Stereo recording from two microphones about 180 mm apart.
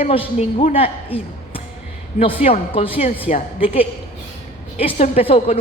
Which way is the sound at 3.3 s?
45° left (ahead or behind).